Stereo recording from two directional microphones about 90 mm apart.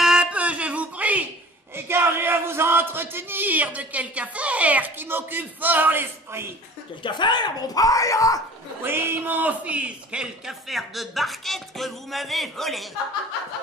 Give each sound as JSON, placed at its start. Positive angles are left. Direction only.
{"t": 0.0, "sound": "a sound", "side_deg": -10}
{"t": 7.0, "sound": "speech", "side_deg": 60}
{"t": 8.8, "sound": "a man's voice", "side_deg": -25}